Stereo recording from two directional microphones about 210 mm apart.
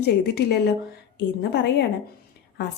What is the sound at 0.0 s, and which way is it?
A woman's voice, 55° left (ahead or behind).